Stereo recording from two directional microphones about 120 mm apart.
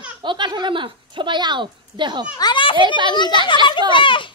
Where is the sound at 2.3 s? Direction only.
40° left (ahead or behind).